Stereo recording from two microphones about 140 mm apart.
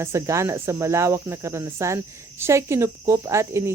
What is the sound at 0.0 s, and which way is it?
Speech, 20° right (ahead or behind).